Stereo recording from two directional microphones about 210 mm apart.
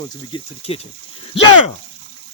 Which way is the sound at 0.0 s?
25° left (ahead or behind).